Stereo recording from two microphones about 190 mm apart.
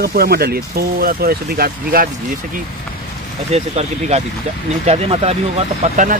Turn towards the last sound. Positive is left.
turn(degrees=-40)  # may be behind; listen again after turning